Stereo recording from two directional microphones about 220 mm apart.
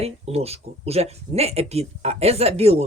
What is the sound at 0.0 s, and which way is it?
Speech, 30° right (ahead or behind).